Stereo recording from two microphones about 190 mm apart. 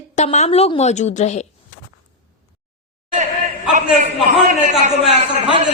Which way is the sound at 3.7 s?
40° right (ahead or behind).